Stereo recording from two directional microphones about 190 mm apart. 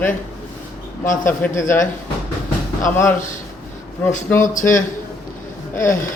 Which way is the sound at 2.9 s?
10° left (ahead or behind).